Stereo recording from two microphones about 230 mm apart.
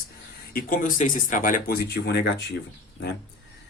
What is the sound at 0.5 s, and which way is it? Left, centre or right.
Speech, left.